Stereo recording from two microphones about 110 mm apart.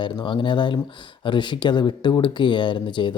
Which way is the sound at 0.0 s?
45° left (ahead or behind).